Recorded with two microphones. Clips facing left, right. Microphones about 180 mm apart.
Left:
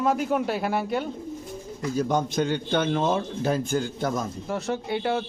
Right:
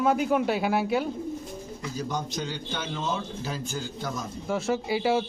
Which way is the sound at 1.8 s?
50° left (ahead or behind).